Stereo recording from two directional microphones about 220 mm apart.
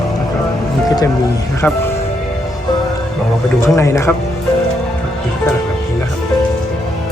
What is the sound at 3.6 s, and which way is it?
Speech, 15° left (ahead or behind).